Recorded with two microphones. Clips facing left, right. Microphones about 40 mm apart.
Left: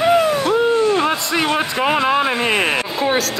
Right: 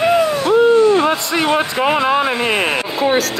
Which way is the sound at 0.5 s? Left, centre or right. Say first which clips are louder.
Right 5 dB; centre.